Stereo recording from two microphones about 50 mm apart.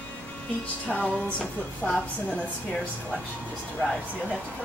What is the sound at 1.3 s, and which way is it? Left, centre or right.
Speech, left.